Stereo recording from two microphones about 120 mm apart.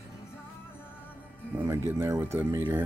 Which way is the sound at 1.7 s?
20° right (ahead or behind).